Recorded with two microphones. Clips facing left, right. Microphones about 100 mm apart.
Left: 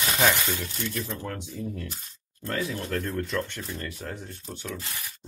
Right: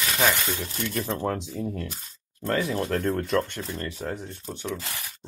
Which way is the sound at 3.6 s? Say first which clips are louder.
Right 3 dB; 40° right (ahead or behind).